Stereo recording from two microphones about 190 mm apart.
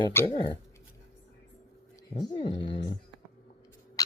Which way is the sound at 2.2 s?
25° left (ahead or behind).